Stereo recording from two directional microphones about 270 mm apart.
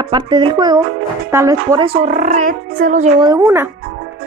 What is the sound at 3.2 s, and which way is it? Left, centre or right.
Speech, centre.